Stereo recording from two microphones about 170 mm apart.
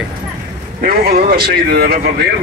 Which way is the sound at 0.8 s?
65° right (ahead or behind).